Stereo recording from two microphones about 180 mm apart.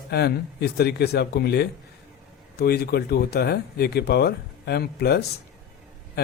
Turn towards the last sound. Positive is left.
turn(degrees=60)  # may be behind; listen again after turning